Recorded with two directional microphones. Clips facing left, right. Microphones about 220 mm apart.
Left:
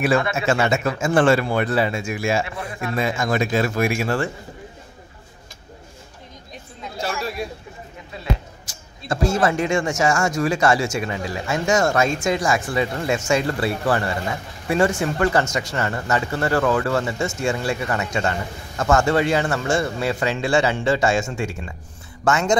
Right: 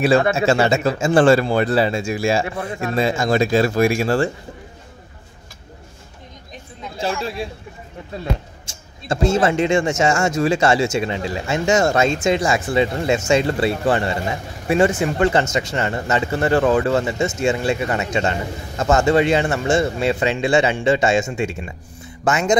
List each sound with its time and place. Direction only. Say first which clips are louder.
0.2 s speech: right 4 dB; 30° right (ahead or behind)
7.0 s speech: right 3 dB; 30° right (ahead or behind)
8.6 s speech: right 2 dB; 25° right (ahead or behind)